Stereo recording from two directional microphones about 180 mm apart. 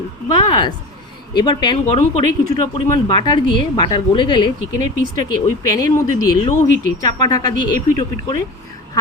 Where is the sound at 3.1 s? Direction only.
25° left (ahead or behind).